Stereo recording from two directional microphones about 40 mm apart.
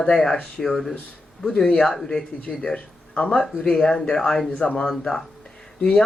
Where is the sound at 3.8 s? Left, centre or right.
Centre.